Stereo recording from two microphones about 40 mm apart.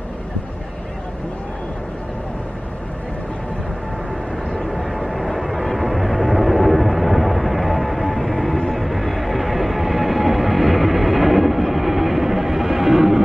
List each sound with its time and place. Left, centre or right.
4.6 s vehicle: centre
8.7 s train: centre